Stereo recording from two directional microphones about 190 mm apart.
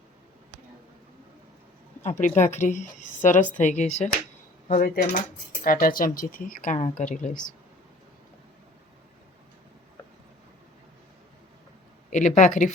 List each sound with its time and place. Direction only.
2.0 s speech: 40° left (ahead or behind)
12.1 s speech: 40° left (ahead or behind)